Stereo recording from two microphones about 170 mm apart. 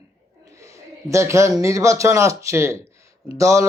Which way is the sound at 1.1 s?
15° right (ahead or behind).